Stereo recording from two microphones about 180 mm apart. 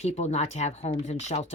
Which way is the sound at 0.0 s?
40° left (ahead or behind).